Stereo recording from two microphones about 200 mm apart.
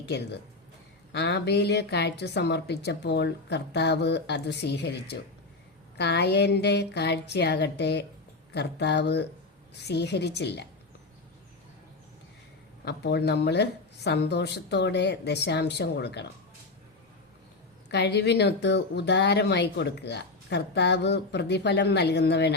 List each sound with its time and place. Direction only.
0.0 s speech: 55° left (ahead or behind)
12.8 s speech: 55° left (ahead or behind)
17.9 s speech: 55° left (ahead or behind)